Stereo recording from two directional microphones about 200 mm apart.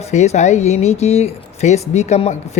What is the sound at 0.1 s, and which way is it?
Speech, 35° left (ahead or behind).